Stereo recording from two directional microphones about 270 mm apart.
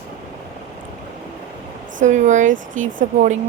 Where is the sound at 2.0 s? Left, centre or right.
Right.